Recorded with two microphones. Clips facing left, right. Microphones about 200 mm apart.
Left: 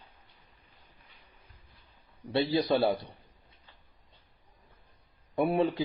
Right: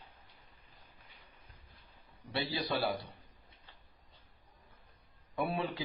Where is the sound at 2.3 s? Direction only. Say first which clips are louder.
Left 9 dB; 20° left (ahead or behind).